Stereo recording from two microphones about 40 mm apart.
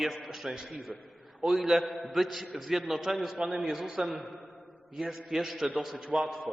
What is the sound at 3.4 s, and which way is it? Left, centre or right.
Speech, right.